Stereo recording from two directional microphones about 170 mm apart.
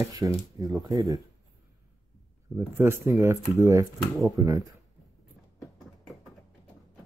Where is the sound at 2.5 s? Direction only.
15° right (ahead or behind).